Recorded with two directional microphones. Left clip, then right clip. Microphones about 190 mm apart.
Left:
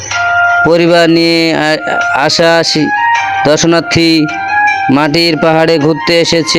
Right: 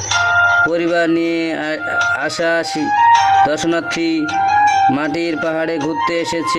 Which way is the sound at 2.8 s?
30° left (ahead or behind).